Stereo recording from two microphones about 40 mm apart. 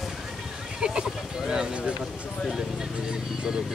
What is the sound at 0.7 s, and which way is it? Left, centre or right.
Music, centre.